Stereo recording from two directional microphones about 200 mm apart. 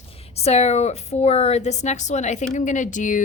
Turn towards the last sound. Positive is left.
turn(degrees=40)  # may be behind; listen again after turning